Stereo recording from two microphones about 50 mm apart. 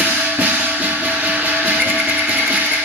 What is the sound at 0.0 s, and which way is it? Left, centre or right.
Music, right.